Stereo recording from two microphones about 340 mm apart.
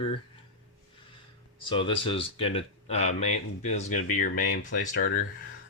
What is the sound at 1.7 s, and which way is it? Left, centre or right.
Speech, centre.